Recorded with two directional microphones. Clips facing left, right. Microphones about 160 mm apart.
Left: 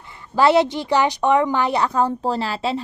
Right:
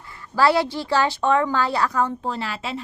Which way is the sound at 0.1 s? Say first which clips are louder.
Left 3 dB; 20° left (ahead or behind).